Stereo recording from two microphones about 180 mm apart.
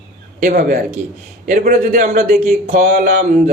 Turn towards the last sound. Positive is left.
turn(degrees=-55)  # may be behind; listen again after turning